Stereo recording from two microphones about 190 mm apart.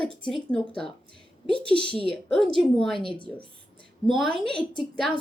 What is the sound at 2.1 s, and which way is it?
A woman's voice, 5° left (ahead or behind).